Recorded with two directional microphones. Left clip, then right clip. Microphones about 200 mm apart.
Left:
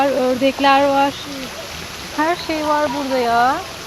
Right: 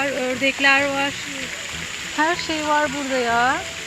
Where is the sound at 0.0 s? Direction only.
15° left (ahead or behind).